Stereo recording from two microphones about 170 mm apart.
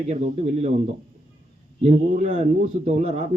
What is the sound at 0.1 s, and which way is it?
A man's voice, 40° right (ahead or behind).